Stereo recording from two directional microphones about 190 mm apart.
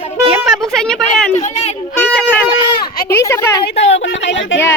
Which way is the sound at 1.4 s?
35° left (ahead or behind).